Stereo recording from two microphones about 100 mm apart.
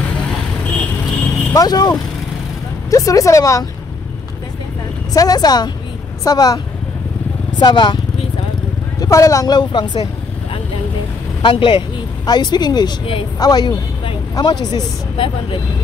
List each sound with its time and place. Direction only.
1.5 s speech: 40° left (ahead or behind)
5.1 s speech: 40° left (ahead or behind)
9.0 s speech: 35° left (ahead or behind); by 10.0 s 50° left (ahead or behind)
11.4 s speech: 60° left (ahead or behind)
12.3 s speech: 45° left (ahead or behind)